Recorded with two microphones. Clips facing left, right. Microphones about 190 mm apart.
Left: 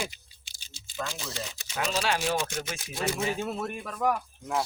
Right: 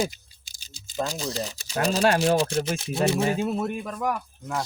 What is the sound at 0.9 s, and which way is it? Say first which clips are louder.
Speech: right 7 dB; 40° right (ahead or behind).